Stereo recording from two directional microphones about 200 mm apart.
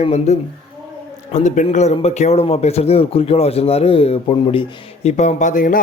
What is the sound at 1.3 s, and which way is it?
A man's voice, 35° left (ahead or behind).